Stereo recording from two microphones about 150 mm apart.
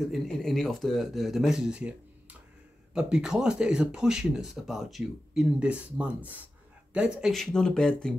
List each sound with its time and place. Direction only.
0.1 s speech: centre (ahead or behind)